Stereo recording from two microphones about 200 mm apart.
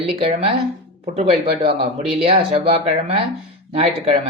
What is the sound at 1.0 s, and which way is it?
Speech, 30° right (ahead or behind).